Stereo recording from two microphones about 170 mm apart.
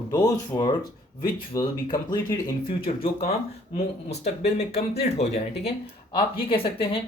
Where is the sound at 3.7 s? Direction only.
40° left (ahead or behind).